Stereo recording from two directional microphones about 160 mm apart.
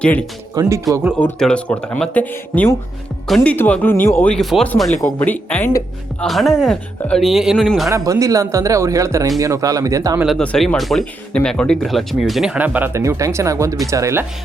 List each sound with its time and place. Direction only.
0.0 s speech: 5° left (ahead or behind)
0.5 s speech: 25° right (ahead or behind)
1.2 s speech: 5° left (ahead or behind)
4.9 s speech: 15° left (ahead or behind)
6.2 s speech: centre (ahead or behind)
7.9 s speech: 20° right (ahead or behind)
10.2 s speech: centre (ahead or behind); by 14.3 s 15° right (ahead or behind)